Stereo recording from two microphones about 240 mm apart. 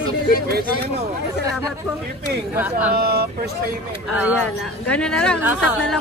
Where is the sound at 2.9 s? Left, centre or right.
Right.